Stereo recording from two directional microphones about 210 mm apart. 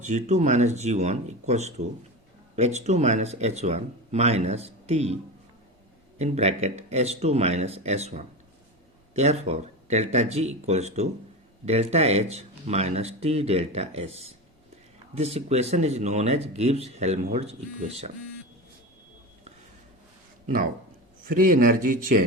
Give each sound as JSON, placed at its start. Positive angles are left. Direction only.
{"t": 0.0, "sound": "speech", "side_deg": -35}
{"t": 6.1, "sound": "speech", "side_deg": -30}
{"t": 21.2, "sound": "speech", "side_deg": -40}